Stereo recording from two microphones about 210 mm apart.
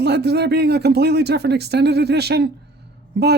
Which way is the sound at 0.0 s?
50° right (ahead or behind).